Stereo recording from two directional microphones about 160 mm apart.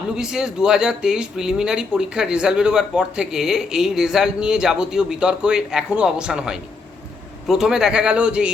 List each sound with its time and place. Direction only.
0.2 s speech: 5° right (ahead or behind)